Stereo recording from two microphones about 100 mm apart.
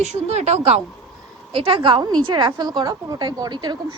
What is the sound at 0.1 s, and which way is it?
Speech, 90° right.